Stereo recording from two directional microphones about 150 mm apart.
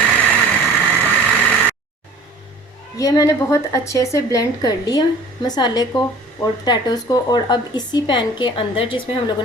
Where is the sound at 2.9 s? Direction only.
20° left (ahead or behind).